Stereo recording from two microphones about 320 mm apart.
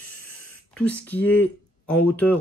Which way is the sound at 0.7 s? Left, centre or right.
Centre.